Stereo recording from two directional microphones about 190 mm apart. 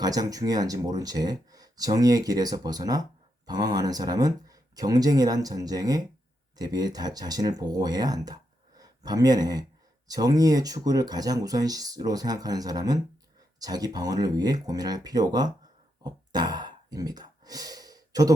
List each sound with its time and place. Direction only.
0.0 s speech: 20° right (ahead or behind)
16.0 s sigh: 20° right (ahead or behind)